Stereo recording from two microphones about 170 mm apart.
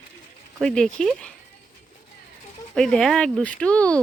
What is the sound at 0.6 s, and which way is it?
Speech, 5° left (ahead or behind).